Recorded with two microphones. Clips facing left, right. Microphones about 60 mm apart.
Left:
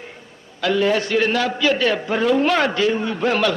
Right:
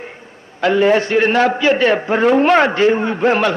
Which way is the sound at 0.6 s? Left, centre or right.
Right.